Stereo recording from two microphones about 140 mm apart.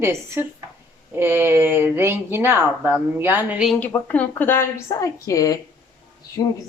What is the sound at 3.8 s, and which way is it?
A woman's voice, 10° left (ahead or behind).